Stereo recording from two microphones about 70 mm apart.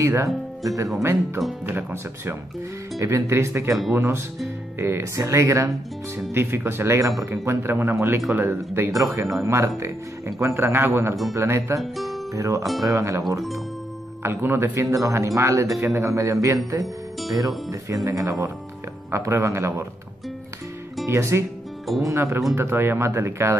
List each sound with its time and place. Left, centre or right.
0.0 s speech: right
1.7 s speech: right
3.0 s speech: right
6.3 s speech: right
7.0 s speech: right
8.9 s speech: right
11.8 s speech: centre
12.4 s speech: right
14.2 s speech: right
16.8 s speech: centre
17.6 s speech: right
21.1 s speech: right